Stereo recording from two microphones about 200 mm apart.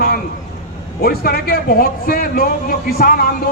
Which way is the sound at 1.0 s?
50° left (ahead or behind).